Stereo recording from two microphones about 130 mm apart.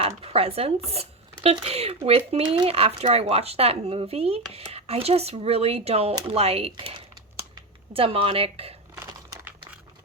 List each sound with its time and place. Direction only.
0.0 s speech: 50° right (ahead or behind)